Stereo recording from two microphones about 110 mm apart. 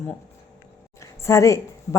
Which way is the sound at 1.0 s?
25° left (ahead or behind).